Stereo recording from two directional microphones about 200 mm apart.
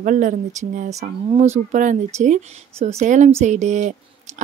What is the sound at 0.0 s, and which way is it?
A woman's voice, 40° right (ahead or behind).